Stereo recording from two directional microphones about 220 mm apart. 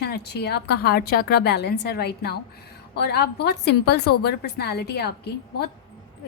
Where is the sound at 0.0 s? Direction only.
50° left (ahead or behind).